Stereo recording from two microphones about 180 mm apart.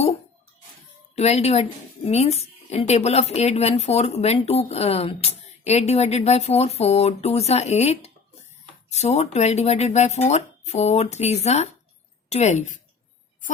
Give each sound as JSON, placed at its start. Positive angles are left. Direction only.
{"t": 1.1, "sound": "speech", "side_deg": 35}